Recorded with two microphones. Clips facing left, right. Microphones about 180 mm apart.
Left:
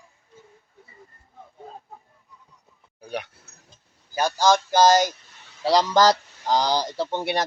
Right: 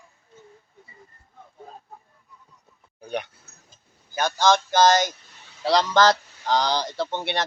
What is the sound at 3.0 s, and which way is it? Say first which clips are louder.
Speech: right 2 dB; 5° left (ahead or behind).